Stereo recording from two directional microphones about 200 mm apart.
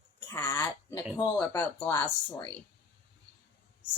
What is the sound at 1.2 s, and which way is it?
A woman's voice, 10° left (ahead or behind).